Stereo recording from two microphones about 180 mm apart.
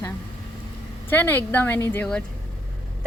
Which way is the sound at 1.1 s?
10° left (ahead or behind).